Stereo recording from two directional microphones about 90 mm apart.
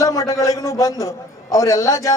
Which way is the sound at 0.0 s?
40° left (ahead or behind).